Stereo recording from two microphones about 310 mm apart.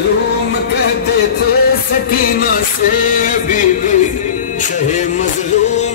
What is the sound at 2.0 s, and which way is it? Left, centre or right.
Music, left.